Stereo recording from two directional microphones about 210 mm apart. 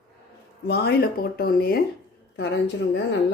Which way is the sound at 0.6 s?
50° left (ahead or behind).